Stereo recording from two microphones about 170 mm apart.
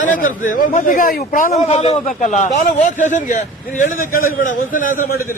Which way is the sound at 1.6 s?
40° left (ahead or behind).